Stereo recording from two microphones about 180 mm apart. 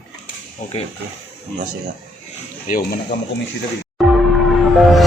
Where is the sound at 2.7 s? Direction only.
50° left (ahead or behind).